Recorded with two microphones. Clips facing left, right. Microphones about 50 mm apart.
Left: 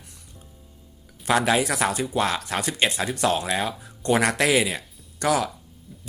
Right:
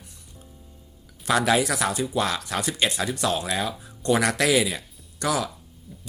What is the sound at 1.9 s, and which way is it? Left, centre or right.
Speech, left.